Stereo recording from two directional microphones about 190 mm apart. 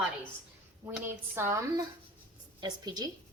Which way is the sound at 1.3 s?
15° right (ahead or behind).